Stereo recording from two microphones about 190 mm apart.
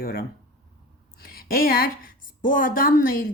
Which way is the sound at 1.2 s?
50° left (ahead or behind).